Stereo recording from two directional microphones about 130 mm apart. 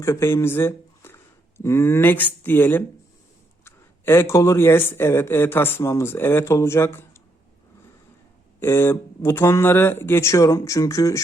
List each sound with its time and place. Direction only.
0.0 s speech: 20° left (ahead or behind)
8.6 s speech: 20° left (ahead or behind)